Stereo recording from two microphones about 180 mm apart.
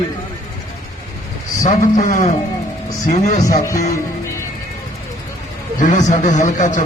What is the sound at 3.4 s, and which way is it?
Speech, 15° left (ahead or behind).